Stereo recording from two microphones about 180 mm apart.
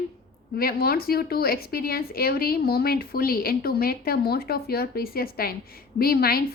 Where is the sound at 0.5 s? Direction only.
60° left (ahead or behind).